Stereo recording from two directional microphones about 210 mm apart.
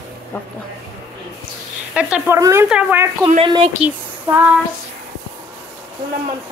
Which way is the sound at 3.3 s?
25° right (ahead or behind).